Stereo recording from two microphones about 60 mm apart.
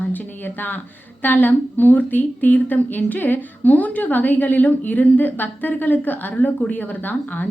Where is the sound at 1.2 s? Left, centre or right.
Left.